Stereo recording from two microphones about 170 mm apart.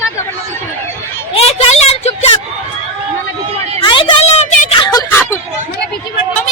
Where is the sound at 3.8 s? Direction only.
30° left (ahead or behind).